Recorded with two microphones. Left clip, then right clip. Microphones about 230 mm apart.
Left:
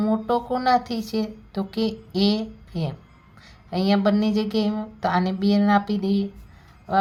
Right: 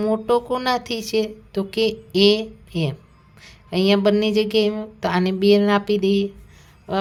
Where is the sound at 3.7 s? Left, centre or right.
Right.